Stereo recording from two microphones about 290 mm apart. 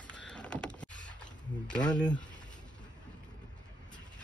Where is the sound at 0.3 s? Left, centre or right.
Centre.